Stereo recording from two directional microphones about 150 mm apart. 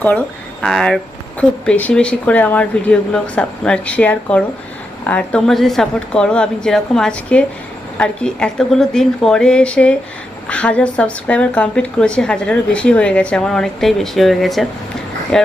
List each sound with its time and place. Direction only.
0.6 s a woman's voice: 5° left (ahead or behind)